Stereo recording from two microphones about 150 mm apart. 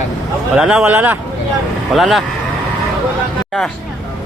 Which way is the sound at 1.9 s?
Centre (ahead or behind).